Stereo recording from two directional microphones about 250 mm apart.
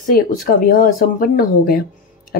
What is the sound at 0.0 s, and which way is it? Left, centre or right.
Speech, left.